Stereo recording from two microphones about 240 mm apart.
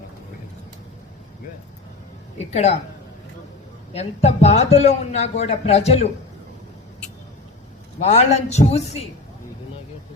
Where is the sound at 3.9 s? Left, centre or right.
Left.